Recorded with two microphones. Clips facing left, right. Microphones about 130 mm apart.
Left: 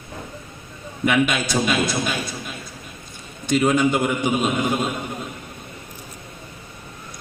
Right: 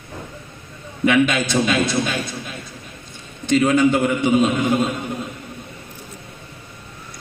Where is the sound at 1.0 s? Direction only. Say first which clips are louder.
Right 3 dB; 10° left (ahead or behind).